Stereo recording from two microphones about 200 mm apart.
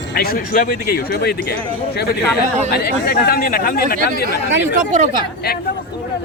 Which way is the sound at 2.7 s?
50° left (ahead or behind).